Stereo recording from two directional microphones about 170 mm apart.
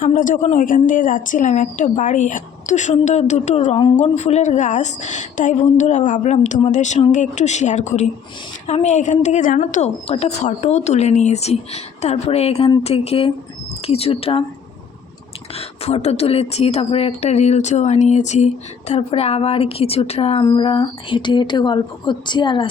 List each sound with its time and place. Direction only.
0.0 s a woman's voice: 50° left (ahead or behind); by 14.4 s 35° left (ahead or behind)
15.5 s a woman's voice: 40° left (ahead or behind)